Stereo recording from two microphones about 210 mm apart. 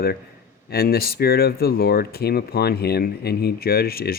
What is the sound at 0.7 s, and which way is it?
Speech, 45° left (ahead or behind).